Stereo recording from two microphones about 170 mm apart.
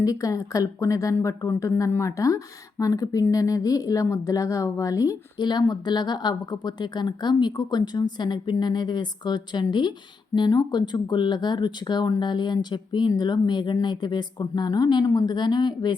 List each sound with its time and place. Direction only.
0.0 s speech: 20° left (ahead or behind)